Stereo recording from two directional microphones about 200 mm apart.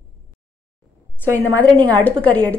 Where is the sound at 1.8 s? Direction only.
20° right (ahead or behind).